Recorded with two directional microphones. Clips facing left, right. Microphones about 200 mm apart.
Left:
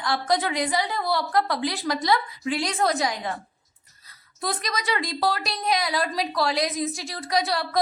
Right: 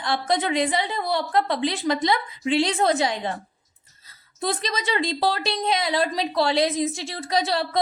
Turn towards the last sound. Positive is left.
turn(degrees=-30)  # may be behind; listen again after turning